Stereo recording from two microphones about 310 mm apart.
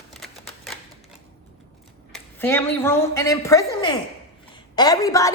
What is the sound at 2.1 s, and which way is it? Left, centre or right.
A woman's voice, centre.